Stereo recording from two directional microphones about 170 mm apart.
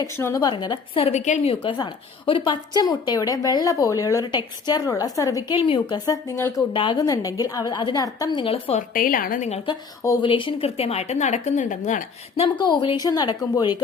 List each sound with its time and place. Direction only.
0.0 s a woman's voice: 20° left (ahead or behind); by 1.5 s 45° left (ahead or behind)
1.6 s a woman's voice: 30° left (ahead or behind)
5.5 s speech: 30° left (ahead or behind)
5.9 s a woman's voice: 20° left (ahead or behind)
6.7 s a woman's voice: 25° left (ahead or behind)
8.9 s a woman's voice: 55° left (ahead or behind)
10.0 s a woman's voice: 20° left (ahead or behind)
10.2 s speech: 30° left (ahead or behind); by 12.5 s 45° left (ahead or behind)
12.5 s a woman's voice: 25° left (ahead or behind)